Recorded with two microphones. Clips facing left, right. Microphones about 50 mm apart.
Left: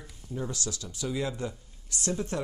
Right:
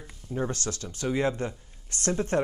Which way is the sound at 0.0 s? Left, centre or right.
Right.